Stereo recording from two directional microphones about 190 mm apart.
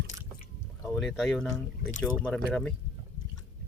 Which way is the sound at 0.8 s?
Centre (ahead or behind).